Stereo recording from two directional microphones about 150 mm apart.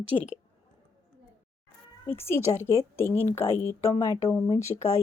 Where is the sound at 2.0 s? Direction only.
15° left (ahead or behind).